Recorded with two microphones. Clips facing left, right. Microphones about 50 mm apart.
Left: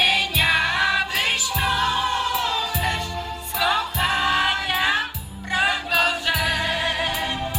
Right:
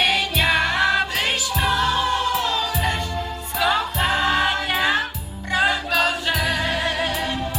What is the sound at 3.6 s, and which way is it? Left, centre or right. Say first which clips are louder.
Music: right 1 dB; centre.